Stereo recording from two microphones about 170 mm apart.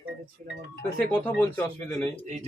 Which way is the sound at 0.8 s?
10° left (ahead or behind).